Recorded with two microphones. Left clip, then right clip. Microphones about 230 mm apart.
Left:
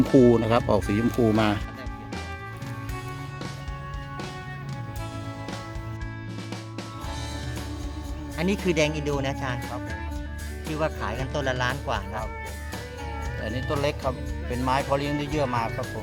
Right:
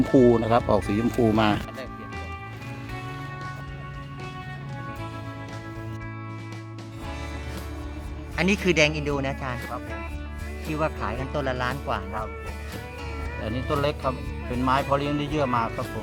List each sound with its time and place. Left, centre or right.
0.0 s speech: centre
0.3 s speech: left
0.9 s speech: centre
8.4 s speech: centre
10.7 s speech: centre
13.4 s speech: left